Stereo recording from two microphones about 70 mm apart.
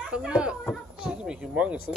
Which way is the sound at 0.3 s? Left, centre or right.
Centre.